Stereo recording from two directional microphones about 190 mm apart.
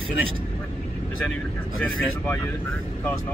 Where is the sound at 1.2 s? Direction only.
5° left (ahead or behind).